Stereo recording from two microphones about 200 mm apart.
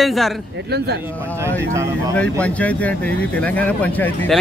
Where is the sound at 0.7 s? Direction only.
55° right (ahead or behind).